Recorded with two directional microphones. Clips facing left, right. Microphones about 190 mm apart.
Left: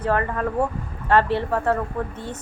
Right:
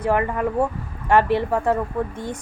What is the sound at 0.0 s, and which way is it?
A woman's voice, 15° right (ahead or behind).